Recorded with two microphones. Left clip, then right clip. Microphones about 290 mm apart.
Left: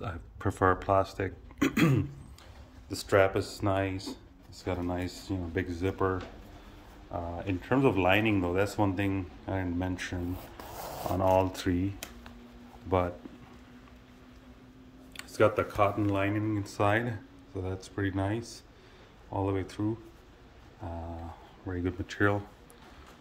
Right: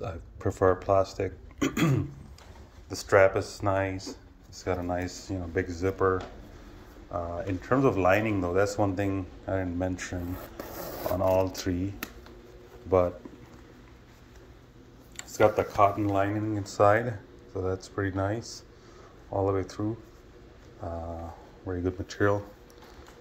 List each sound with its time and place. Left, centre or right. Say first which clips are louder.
0.0 s speech: right 2 dB; centre
11.1 s speech: even; centre
15.1 s speech: right 2 dB; centre
21.6 s speech: right 3 dB; centre